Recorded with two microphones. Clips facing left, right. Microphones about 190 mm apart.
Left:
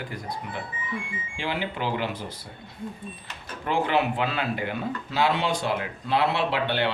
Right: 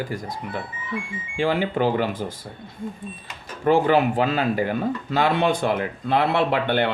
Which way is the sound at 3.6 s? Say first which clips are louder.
Right 7 dB; 45° right (ahead or behind).